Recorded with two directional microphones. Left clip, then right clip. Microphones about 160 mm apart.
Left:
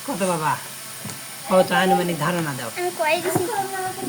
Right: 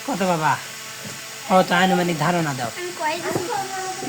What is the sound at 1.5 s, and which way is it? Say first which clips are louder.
Speech: even; 55° right (ahead or behind).